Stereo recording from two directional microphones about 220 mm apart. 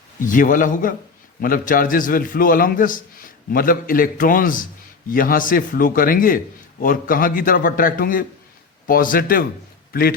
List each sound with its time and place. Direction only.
0.2 s a man's voice: 35° left (ahead or behind)